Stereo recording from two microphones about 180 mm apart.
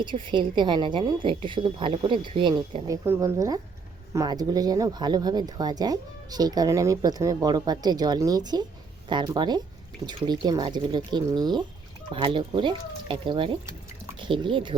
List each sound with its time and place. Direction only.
0.0 s speech: 25° right (ahead or behind)